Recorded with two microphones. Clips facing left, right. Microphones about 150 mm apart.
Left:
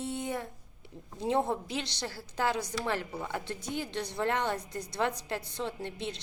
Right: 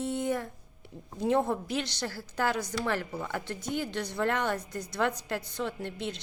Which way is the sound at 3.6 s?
55° right (ahead or behind).